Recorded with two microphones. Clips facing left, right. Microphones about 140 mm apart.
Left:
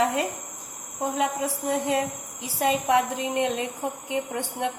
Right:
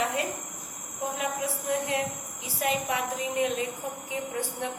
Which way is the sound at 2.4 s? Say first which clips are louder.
Left 4 dB; 90° left.